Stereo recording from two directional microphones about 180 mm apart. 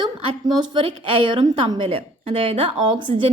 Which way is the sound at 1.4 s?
30° right (ahead or behind).